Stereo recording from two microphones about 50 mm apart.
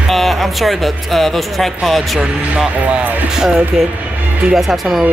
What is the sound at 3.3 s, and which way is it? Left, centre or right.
Speech, centre.